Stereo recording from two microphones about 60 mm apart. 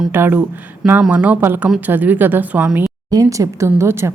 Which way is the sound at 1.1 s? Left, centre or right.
Right.